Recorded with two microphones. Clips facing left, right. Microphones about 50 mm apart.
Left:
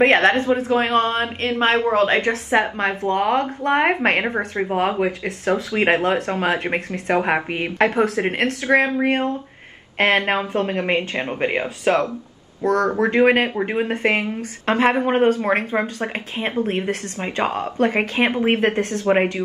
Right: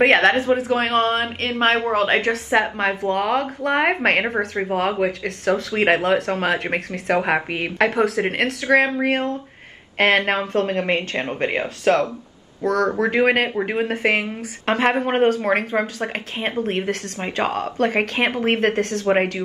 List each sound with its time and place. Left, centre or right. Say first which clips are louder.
0.0 s speech: even; centre